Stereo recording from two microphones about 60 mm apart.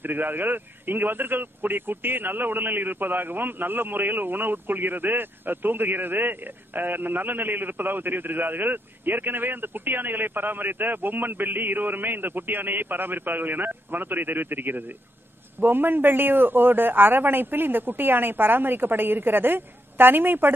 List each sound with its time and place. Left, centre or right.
0.0 s speech: right